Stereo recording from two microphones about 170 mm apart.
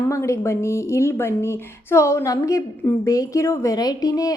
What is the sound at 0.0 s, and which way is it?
Speech, 15° left (ahead or behind).